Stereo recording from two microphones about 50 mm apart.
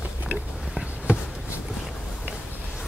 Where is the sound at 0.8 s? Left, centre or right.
Right.